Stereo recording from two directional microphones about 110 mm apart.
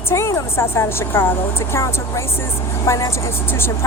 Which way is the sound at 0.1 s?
25° left (ahead or behind).